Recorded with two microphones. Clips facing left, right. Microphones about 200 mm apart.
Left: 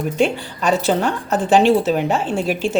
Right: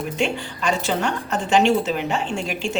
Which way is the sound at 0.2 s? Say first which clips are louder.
Left 6 dB; 35° left (ahead or behind).